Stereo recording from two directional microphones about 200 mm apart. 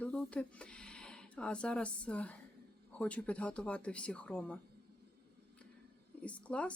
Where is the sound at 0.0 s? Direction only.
5° left (ahead or behind).